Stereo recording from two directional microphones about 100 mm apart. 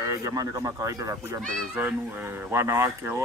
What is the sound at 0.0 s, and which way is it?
Speech, 35° right (ahead or behind).